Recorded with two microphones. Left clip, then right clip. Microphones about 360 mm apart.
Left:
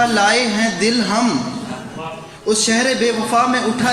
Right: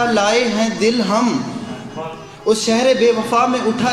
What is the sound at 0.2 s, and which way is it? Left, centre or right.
Speech, centre.